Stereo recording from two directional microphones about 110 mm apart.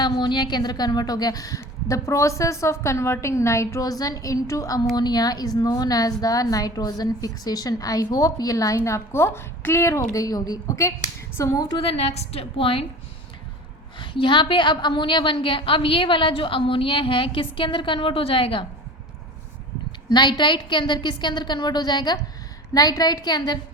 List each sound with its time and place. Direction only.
0.0 s a woman's voice: 45° left (ahead or behind)
11.7 s a woman's voice: 60° left (ahead or behind)
14.0 s a woman's voice: 45° left (ahead or behind)
20.1 s a woman's voice: 40° left (ahead or behind)